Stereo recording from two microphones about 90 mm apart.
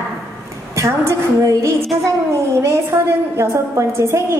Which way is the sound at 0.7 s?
30° right (ahead or behind).